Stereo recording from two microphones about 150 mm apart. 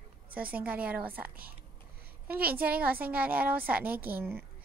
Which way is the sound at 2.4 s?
85° right.